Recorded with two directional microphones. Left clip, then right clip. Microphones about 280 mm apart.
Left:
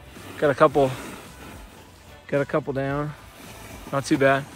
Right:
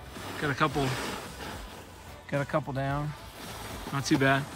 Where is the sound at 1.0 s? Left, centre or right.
Centre.